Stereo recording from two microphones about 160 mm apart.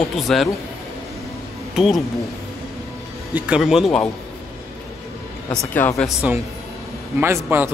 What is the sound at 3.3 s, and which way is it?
Speech, 5° right (ahead or behind).